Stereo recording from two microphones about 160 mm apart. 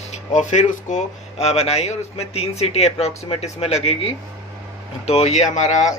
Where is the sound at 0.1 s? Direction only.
50° left (ahead or behind).